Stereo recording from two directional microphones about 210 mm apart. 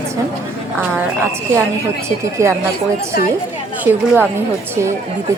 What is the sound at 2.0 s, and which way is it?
Speech, 15° right (ahead or behind).